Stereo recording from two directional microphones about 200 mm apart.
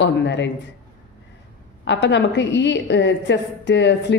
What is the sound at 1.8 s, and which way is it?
A woman's voice, 60° left (ahead or behind).